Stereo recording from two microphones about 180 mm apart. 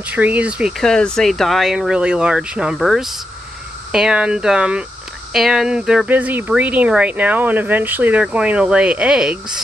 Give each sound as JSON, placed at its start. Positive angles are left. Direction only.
{"t": 0.0, "sound": "speech", "side_deg": -10}